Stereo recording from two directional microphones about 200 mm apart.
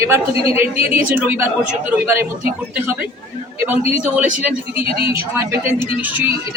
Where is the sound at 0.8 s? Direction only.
10° right (ahead or behind).